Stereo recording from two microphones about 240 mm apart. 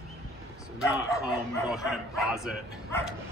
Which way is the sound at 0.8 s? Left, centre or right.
Centre.